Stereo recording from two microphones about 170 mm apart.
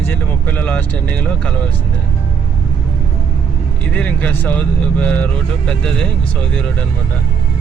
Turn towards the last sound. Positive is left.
turn(degrees=5)  # may be behind; listen again after turning